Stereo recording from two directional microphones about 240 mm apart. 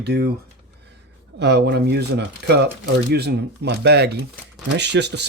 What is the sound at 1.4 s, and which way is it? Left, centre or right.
Speech, right.